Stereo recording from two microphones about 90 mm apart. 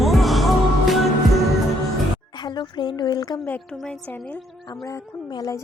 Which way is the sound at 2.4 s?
55° left (ahead or behind).